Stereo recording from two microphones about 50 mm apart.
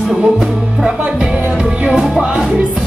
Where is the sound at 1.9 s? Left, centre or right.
Centre.